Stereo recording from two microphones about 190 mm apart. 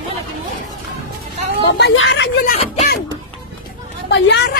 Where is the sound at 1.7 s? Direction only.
70° left (ahead or behind).